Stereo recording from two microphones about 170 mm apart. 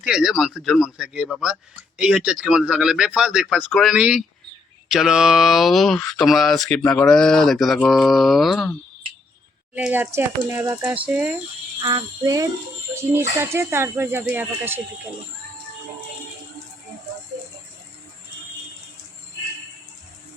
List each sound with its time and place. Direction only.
0.0 s speech: 5° right (ahead or behind)
9.7 s speech: 10° right (ahead or behind)
11.8 s speech: 25° right (ahead or behind)